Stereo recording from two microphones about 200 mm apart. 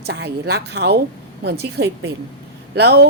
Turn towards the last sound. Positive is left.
turn(degrees=-55)  # may be behind; listen again after turning